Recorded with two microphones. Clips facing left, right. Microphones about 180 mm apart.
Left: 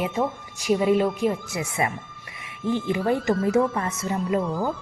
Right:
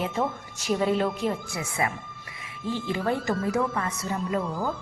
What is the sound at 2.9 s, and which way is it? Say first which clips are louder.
Speech: left 2 dB; 15° left (ahead or behind).